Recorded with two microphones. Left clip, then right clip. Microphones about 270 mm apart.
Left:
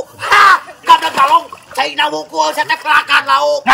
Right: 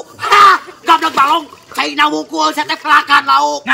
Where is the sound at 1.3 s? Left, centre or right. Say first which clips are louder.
Left 3 dB; centre.